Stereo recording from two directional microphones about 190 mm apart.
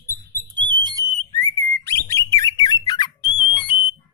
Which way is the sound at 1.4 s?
15° left (ahead or behind).